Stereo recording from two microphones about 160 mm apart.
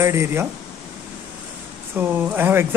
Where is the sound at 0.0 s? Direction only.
15° right (ahead or behind).